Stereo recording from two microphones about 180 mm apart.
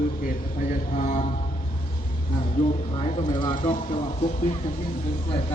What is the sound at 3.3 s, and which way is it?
Speech, 25° left (ahead or behind).